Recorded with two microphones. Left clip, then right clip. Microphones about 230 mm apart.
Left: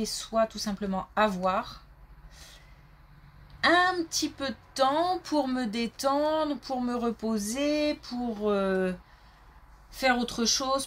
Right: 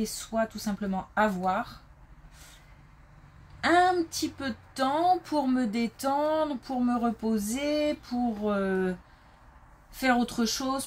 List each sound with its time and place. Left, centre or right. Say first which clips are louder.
0.0 s speech: left 3 dB; left
3.6 s speech: even; left
9.9 s speech: even; left